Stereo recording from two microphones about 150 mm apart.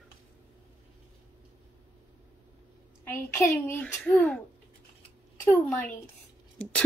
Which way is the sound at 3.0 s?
15° left (ahead or behind).